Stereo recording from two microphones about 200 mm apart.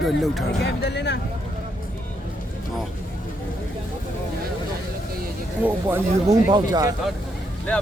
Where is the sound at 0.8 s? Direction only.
60° left (ahead or behind).